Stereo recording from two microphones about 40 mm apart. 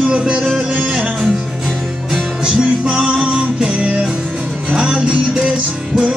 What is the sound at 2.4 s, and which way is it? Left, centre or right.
Music, right.